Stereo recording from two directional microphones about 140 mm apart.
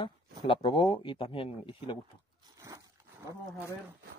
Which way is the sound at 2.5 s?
25° right (ahead or behind).